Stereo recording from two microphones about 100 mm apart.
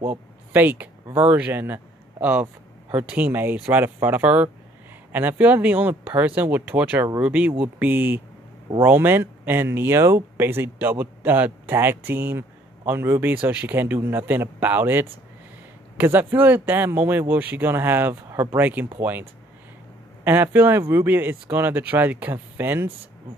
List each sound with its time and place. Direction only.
0.0 s speech: 20° right (ahead or behind)
18.6 s speech: 20° right (ahead or behind)
20.2 s speech: 20° right (ahead or behind)